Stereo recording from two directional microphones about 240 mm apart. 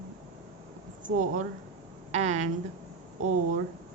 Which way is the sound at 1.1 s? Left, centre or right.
Right.